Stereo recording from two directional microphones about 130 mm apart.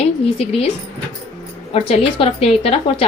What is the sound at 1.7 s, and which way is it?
Speech, 45° left (ahead or behind).